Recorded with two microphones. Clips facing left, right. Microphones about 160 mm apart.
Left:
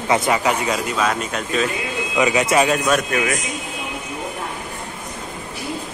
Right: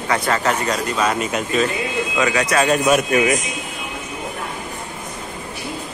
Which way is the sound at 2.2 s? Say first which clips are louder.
Left 2 dB; 20° left (ahead or behind).